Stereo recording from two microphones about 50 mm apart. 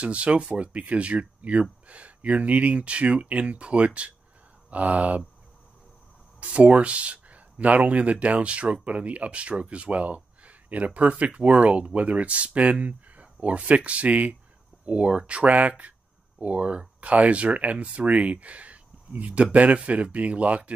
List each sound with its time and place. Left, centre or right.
0.0 s speech: right
6.4 s speech: right